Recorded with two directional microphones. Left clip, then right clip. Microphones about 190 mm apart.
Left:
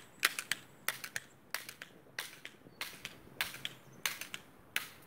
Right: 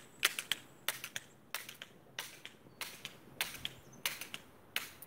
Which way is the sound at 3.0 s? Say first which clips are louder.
Left 1 dB; 20° left (ahead or behind).